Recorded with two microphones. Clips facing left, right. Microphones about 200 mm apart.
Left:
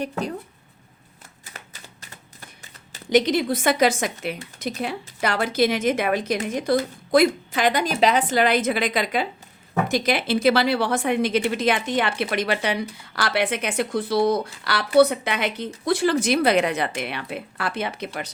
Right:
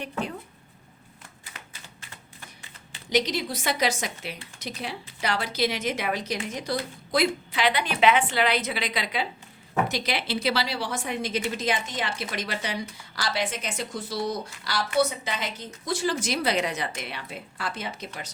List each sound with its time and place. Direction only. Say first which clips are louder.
0.0 s speech: left 5 dB; 40° left (ahead or behind)
2.9 s a woman's voice: left 7 dB; 50° left (ahead or behind)